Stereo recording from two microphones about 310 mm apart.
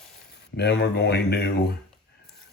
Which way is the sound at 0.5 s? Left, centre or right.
Left.